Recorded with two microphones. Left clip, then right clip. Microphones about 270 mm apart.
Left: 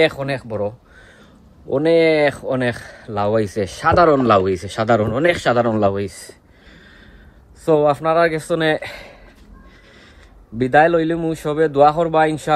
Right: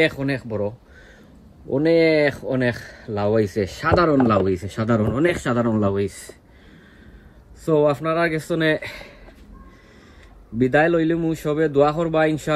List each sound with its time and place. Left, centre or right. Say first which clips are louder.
0.0 s speech: left 3 dB; left
1.8 s speech: left 3 dB; left
4.8 s a man's voice: left 5 dB; centre
7.6 s a man's voice: left 4 dB; centre
10.6 s a man's voice: left 4 dB; centre